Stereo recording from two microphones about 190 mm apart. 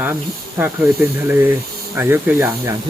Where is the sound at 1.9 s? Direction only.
10° right (ahead or behind).